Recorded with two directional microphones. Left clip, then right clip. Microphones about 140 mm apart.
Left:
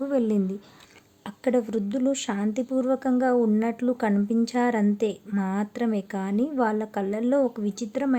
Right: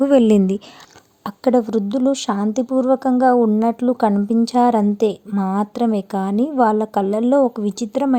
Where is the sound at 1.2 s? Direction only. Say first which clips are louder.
Right 8 dB; 40° right (ahead or behind).